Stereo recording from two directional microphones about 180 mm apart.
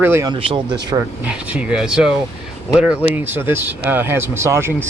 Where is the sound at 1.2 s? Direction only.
5° right (ahead or behind).